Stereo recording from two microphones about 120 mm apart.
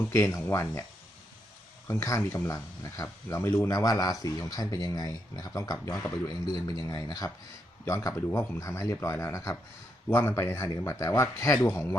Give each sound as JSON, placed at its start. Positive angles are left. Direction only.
{"t": 0.1, "sound": "speech", "side_deg": 25}
{"t": 1.9, "sound": "speech", "side_deg": 25}